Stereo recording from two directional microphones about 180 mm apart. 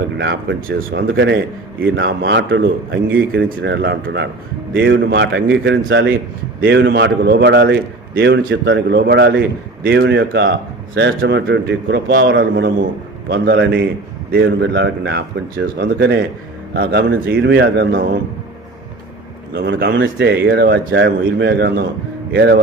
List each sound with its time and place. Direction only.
0.9 s a man's voice: 75° right (ahead or behind)
1.8 s a man's voice: 65° right (ahead or behind)
12.2 s a man's voice: 85° right
13.2 s a man's voice: 65° right (ahead or behind)
19.5 s a man's voice: 70° right (ahead or behind)